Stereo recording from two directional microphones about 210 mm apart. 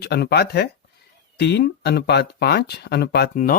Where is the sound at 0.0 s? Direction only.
50° left (ahead or behind).